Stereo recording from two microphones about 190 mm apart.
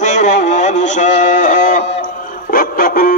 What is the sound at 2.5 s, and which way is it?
Music, 50° left (ahead or behind).